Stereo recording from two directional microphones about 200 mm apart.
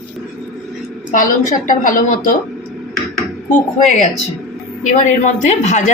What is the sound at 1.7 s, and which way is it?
Speech, 40° left (ahead or behind).